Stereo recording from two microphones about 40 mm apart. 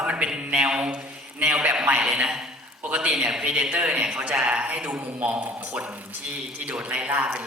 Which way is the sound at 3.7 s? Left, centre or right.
Right.